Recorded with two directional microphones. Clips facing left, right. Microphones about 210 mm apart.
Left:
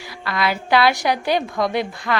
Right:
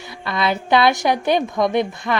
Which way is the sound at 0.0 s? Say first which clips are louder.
Right 1 dB; 20° right (ahead or behind).